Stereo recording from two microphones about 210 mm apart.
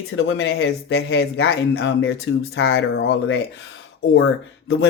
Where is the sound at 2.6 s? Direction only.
70° left (ahead or behind).